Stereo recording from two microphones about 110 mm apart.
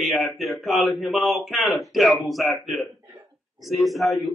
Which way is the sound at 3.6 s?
Centre (ahead or behind).